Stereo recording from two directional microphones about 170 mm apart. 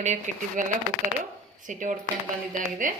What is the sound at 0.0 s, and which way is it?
Speech, 45° right (ahead or behind).